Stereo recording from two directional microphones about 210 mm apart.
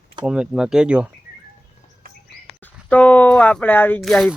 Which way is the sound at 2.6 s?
5° left (ahead or behind).